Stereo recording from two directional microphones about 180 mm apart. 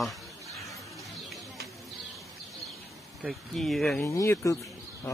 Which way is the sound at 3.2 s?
Centre (ahead or behind).